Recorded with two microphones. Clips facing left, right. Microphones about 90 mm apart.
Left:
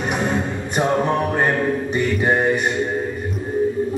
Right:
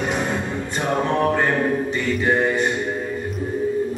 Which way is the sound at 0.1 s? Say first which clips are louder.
Left 2 dB; 20° left (ahead or behind).